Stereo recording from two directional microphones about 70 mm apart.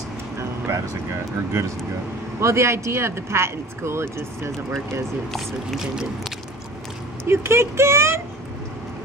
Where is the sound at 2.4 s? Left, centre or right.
Right.